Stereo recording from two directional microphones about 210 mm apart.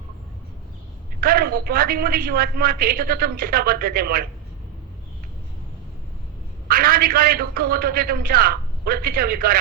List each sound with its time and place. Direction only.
1.2 s a woman's voice: 45° right (ahead or behind)
6.7 s a woman's voice: 45° right (ahead or behind)